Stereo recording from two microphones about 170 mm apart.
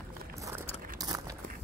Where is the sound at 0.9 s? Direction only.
20° right (ahead or behind).